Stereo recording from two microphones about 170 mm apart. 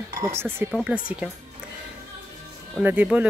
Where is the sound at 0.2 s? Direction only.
15° right (ahead or behind).